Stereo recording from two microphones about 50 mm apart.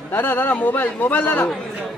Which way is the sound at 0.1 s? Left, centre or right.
Left.